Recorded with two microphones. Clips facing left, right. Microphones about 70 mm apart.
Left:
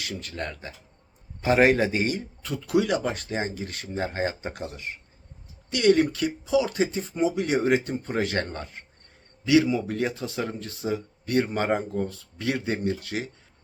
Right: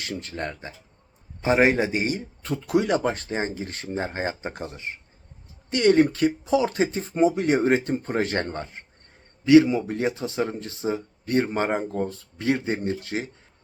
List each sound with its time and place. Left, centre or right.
0.0 s speech: right
2.4 s speech: right